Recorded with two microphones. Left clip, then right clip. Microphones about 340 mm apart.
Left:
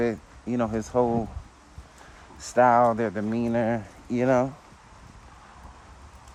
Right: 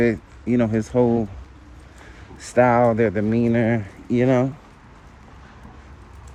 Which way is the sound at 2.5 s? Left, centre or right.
Centre.